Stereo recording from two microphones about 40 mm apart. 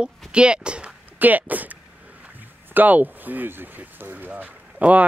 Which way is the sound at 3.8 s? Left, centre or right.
Right.